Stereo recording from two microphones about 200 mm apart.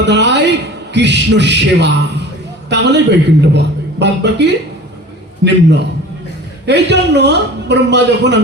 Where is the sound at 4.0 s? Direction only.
60° right (ahead or behind).